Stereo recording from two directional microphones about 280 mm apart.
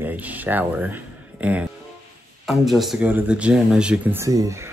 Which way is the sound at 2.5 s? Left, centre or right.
Centre.